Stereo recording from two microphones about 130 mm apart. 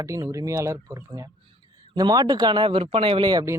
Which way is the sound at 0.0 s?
25° right (ahead or behind).